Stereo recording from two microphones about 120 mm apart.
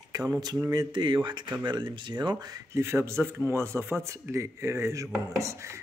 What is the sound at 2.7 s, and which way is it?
Speech, 20° right (ahead or behind).